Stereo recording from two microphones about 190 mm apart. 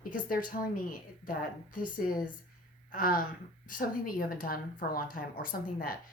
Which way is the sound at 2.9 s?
50° left (ahead or behind).